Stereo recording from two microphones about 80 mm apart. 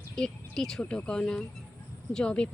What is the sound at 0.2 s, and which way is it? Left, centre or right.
Speech, centre.